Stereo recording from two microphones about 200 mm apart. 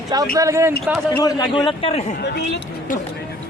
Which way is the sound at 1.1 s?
20° left (ahead or behind).